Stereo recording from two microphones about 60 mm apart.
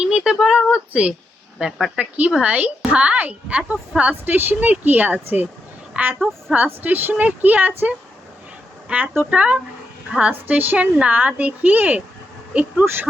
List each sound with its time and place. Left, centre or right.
0.0 s a sound: centre
0.7 s speech: centre
4.1 s a woman's voice: right; by 6.7 s centre
6.8 s speech: right
8.9 s speech: right
10.3 s speech: right
12.8 s speech: right